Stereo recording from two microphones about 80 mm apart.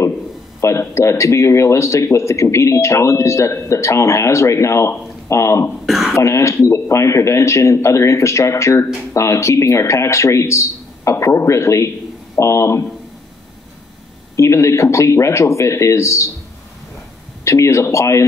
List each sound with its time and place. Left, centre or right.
0.6 s speech: left
5.9 s speech: centre
6.1 s speech: left
14.3 s speech: left
17.5 s speech: left